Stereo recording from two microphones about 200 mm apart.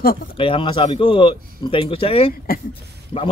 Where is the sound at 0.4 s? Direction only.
25° left (ahead or behind).